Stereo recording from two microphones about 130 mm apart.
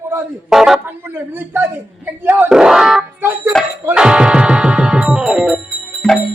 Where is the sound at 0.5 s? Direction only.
5° right (ahead or behind).